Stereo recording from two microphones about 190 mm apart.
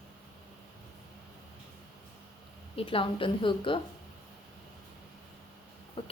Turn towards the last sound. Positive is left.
turn(degrees=30)  # may be behind; listen again after turning